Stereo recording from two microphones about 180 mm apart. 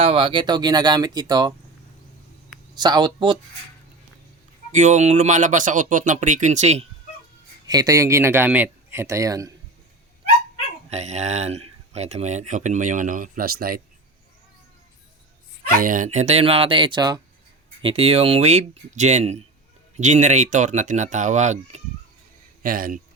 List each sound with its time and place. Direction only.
0.0 s speech: 30° right (ahead or behind)
2.7 s speech: 25° right (ahead or behind)
4.7 s speech: 40° right (ahead or behind)
7.7 s speech: 20° right (ahead or behind)
10.8 s speech: 40° right (ahead or behind); by 13.8 s 55° right (ahead or behind)
15.7 s speech: 50° right (ahead or behind)
22.6 s speech: 50° right (ahead or behind)